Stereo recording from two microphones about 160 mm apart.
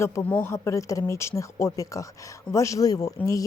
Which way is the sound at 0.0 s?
15° left (ahead or behind).